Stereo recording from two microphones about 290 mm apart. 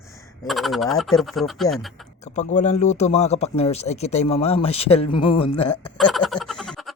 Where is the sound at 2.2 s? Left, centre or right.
Left.